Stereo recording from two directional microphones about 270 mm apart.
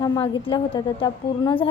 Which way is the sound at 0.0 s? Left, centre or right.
Centre.